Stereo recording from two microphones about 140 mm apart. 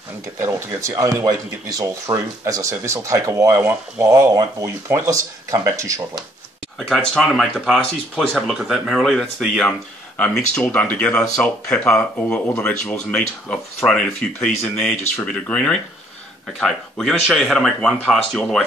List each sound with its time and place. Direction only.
0.4 s speech: 20° right (ahead or behind)
6.8 s speech: 5° left (ahead or behind)